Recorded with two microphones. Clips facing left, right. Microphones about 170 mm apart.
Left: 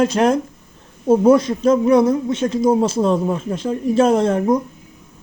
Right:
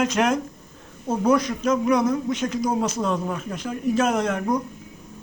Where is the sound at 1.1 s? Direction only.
25° left (ahead or behind).